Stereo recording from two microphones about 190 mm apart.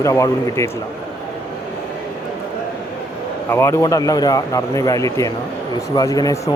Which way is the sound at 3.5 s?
15° left (ahead or behind).